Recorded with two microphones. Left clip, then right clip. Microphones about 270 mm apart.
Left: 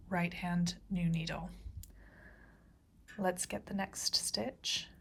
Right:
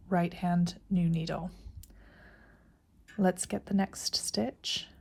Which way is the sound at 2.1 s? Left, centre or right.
Left.